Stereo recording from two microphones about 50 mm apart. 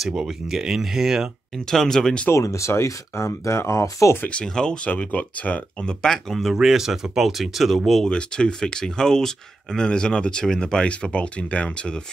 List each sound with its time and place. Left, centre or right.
0.0 s speech: centre
1.7 s speech: centre
2.3 s speech: left
4.3 s speech: centre
4.9 s speech: left
5.9 s speech: centre
8.0 s speech: centre